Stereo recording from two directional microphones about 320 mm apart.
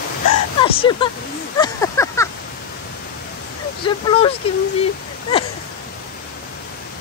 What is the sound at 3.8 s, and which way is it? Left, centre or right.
Speech, centre.